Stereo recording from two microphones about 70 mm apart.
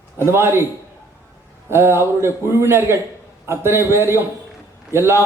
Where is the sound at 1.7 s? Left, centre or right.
Right.